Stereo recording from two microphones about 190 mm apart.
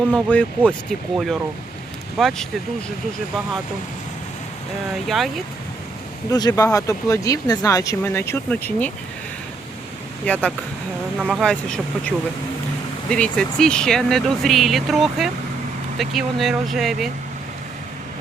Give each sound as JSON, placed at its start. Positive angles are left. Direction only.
{"t": 0.3, "sound": "speech", "side_deg": 5}
{"t": 5.0, "sound": "speech", "side_deg": 0}
{"t": 6.3, "sound": "speech", "side_deg": 20}
{"t": 10.2, "sound": "speech", "side_deg": 5}
{"t": 11.2, "sound": "speech", "side_deg": -5}